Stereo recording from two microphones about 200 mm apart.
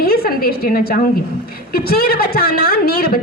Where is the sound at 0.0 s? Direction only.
50° left (ahead or behind).